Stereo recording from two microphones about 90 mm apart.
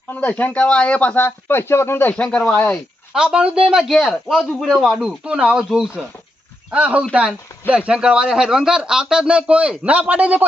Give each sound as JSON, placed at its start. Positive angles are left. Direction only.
{"t": 0.1, "sound": "speech", "side_deg": 15}
{"t": 3.1, "sound": "a man's voice", "side_deg": -10}
{"t": 6.7, "sound": "a man's voice", "side_deg": -15}